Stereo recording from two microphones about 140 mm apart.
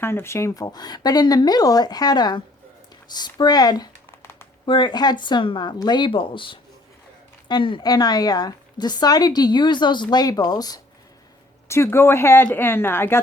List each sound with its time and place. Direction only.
0.0 s speech: 15° left (ahead or behind)
4.2 s a sound: 15° left (ahead or behind)
4.6 s a woman's voice: 35° left (ahead or behind); by 13.2 s 15° left (ahead or behind)